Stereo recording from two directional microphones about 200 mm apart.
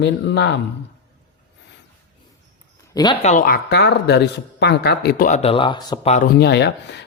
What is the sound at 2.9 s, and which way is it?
Speech, 20° left (ahead or behind).